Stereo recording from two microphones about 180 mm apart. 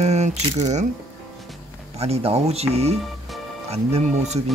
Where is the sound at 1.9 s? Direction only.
35° right (ahead or behind).